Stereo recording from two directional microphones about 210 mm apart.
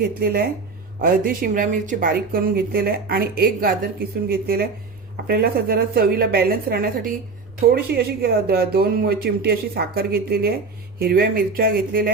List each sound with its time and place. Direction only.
1.0 s speech: 45° right (ahead or behind)